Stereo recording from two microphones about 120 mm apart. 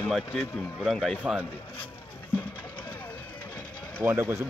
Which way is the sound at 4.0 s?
20° right (ahead or behind).